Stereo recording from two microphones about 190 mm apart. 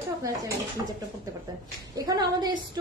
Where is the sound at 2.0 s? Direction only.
20° right (ahead or behind).